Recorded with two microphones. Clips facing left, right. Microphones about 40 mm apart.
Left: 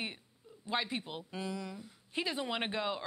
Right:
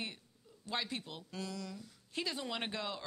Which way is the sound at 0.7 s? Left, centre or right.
Left.